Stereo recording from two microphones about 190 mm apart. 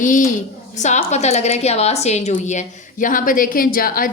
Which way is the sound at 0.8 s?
35° left (ahead or behind).